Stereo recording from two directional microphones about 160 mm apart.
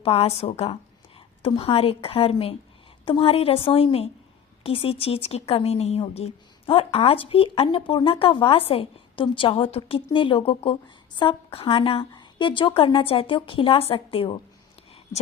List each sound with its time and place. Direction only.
0.0 s speech: 40° left (ahead or behind)